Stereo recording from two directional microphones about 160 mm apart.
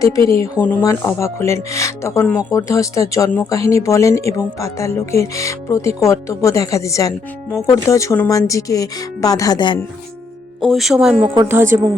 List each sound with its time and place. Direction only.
0.0 s speech: 20° left (ahead or behind)
10.7 s speech: centre (ahead or behind)